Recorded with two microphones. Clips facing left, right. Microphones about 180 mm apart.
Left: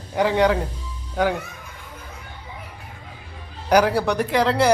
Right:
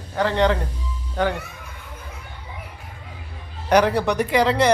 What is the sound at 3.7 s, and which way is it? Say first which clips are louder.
Speech: even; 5° left (ahead or behind).